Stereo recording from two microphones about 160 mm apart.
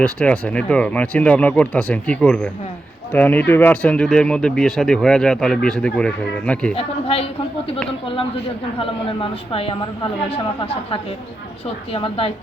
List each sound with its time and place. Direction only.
0.0 s speech: 5° left (ahead or behind)
6.7 s a woman's voice: 40° left (ahead or behind)
9.5 s a woman's voice: 35° left (ahead or behind)